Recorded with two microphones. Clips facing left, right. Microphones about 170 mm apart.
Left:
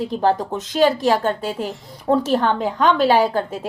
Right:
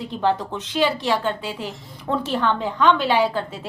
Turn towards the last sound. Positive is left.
turn(degrees=45)  # may be behind; listen again after turning